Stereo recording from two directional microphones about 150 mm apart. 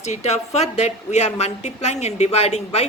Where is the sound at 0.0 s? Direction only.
45° left (ahead or behind).